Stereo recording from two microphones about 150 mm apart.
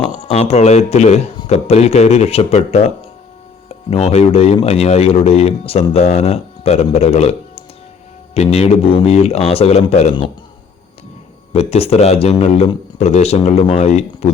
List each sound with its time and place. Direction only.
0.2 s speech: 50° left (ahead or behind)
11.5 s speech: 45° left (ahead or behind)